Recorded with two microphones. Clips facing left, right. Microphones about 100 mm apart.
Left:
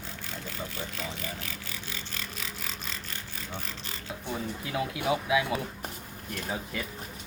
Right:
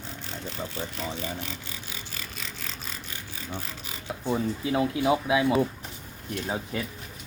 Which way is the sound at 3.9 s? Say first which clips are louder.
Right 8 dB; 20° right (ahead or behind).